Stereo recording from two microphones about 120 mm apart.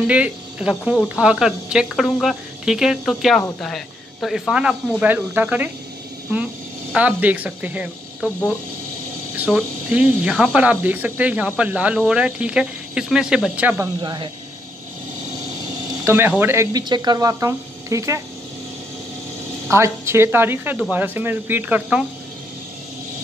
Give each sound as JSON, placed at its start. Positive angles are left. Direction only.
{"t": 0.0, "sound": "speech", "side_deg": -10}
{"t": 6.9, "sound": "speech", "side_deg": -10}
{"t": 9.5, "sound": "speech", "side_deg": -10}
{"t": 14.0, "sound": "speech", "side_deg": -40}
{"t": 16.0, "sound": "speech", "side_deg": -20}
{"t": 16.7, "sound": "speech", "side_deg": -35}
{"t": 19.7, "sound": "speech", "side_deg": -20}